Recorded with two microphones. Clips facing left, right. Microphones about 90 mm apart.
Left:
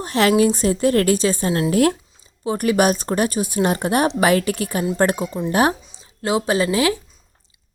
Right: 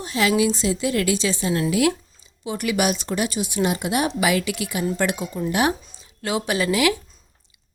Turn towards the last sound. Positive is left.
turn(degrees=30)  # may be behind; listen again after turning